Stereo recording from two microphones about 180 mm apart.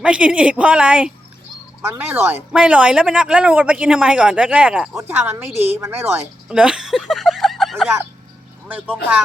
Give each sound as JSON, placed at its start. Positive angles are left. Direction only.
{"t": 0.0, "sound": "a man's voice", "side_deg": -5}